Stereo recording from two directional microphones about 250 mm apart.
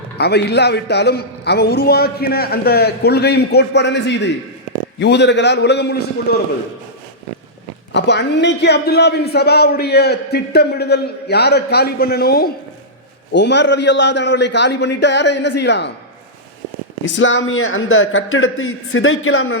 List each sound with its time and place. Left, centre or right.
0.2 s a man's voice: left
7.9 s a man's voice: left
17.2 s a man's voice: left